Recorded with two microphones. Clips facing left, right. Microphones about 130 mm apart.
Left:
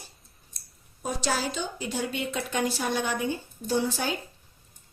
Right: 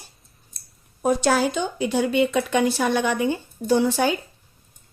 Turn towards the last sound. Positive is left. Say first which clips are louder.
# right 8 dB
turn(degrees=-70)  # may be behind; listen again after turning